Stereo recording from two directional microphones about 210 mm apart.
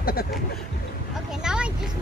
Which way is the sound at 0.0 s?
45° left (ahead or behind).